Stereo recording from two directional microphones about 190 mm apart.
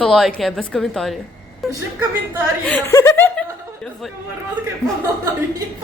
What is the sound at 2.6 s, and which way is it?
Chuckle, 10° left (ahead or behind).